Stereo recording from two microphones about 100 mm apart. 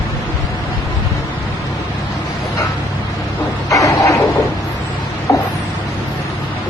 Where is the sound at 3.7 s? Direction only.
35° left (ahead or behind).